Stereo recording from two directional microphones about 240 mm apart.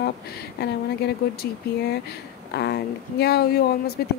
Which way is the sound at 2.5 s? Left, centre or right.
Left.